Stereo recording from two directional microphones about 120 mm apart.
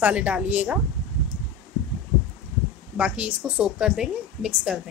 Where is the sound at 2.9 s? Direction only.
10° right (ahead or behind).